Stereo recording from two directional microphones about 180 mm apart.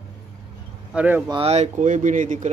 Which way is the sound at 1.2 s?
30° right (ahead or behind).